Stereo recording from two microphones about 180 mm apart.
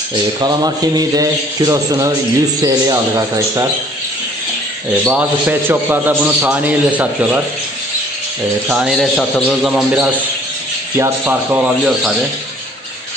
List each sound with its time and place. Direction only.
0.4 s speech: 20° right (ahead or behind)
5.0 s a man's voice: 10° right (ahead or behind)
8.6 s a man's voice: centre (ahead or behind)